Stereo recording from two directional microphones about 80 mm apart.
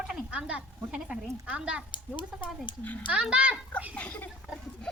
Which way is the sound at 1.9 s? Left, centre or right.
Left.